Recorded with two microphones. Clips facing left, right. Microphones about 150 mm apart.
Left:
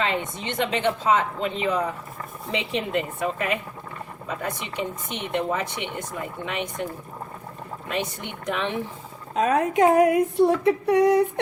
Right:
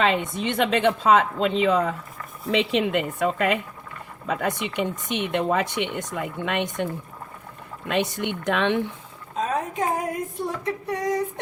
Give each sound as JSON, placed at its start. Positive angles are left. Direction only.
{"t": 0.0, "sound": "speech", "side_deg": -65}
{"t": 7.9, "sound": "speech", "side_deg": -70}
{"t": 9.3, "sound": "speech", "side_deg": 70}